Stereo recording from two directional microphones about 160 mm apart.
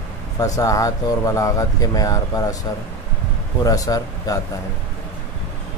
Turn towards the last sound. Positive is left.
turn(degrees=25)  # may be behind; listen again after turning